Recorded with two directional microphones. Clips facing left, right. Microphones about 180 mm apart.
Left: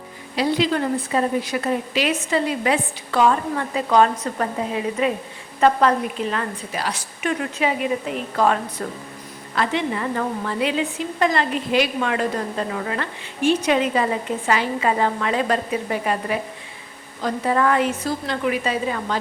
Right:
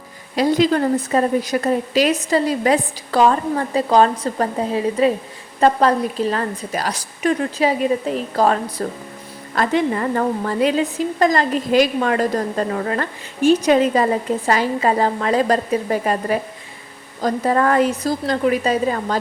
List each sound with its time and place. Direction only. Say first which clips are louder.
0.3 s a woman's voice: right 4 dB; 45° right (ahead or behind)